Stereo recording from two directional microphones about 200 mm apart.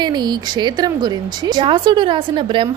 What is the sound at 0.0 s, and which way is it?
A woman's voice, 20° right (ahead or behind).